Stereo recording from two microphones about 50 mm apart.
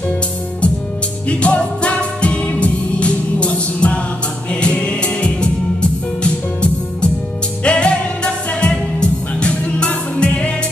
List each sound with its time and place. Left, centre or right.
1.3 s music: left